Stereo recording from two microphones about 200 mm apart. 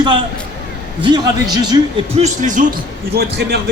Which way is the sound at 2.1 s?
35° right (ahead or behind).